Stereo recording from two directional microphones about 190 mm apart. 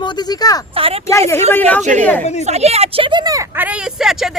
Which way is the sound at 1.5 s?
10° left (ahead or behind).